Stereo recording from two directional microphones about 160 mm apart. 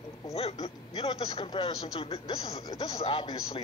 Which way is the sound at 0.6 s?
35° left (ahead or behind).